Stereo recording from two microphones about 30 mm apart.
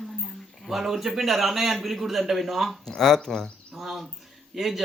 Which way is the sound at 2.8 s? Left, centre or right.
Centre.